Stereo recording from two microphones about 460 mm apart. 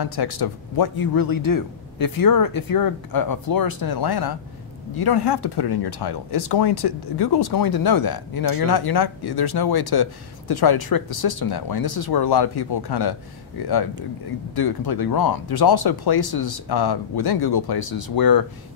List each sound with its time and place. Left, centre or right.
0.0 s speech: left